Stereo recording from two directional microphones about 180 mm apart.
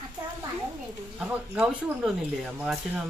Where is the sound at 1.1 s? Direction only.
5° right (ahead or behind).